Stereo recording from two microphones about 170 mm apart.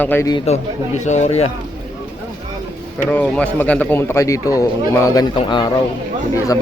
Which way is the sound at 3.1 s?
10° left (ahead or behind).